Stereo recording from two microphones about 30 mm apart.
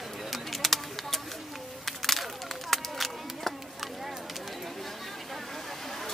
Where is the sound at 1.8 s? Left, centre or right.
Centre.